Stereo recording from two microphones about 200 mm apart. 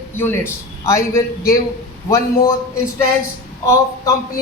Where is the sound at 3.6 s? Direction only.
15° left (ahead or behind).